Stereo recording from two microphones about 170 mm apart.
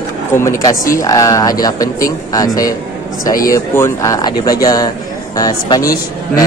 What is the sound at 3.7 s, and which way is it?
Speech, 15° left (ahead or behind).